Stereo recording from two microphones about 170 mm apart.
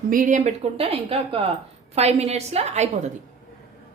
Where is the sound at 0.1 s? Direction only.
50° right (ahead or behind).